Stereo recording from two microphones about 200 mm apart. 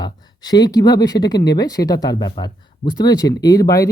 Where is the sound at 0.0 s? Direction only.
20° left (ahead or behind).